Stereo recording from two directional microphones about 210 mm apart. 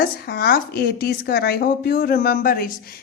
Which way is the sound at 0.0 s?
50° left (ahead or behind).